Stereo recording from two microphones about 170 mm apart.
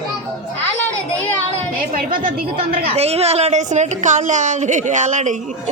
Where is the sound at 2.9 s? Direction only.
35° right (ahead or behind).